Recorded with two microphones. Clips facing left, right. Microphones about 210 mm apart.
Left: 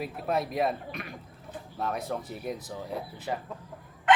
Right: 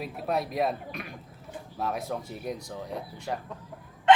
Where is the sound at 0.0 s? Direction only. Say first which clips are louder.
Even; centre (ahead or behind).